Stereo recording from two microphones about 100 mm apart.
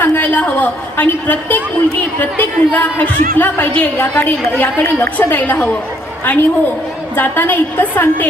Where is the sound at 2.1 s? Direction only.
15° left (ahead or behind).